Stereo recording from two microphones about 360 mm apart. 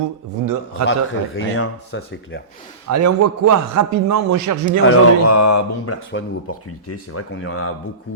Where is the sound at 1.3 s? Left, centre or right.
Left.